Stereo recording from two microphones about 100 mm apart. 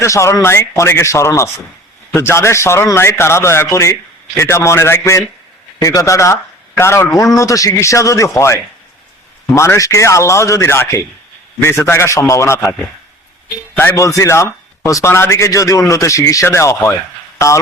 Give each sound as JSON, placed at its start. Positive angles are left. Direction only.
{"t": 0.0, "sound": "a man's voice", "side_deg": 30}
{"t": 13.7, "sound": "a man's voice", "side_deg": 25}